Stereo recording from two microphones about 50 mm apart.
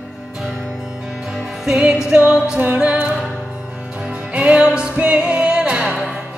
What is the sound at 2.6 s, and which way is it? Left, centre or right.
Music, right.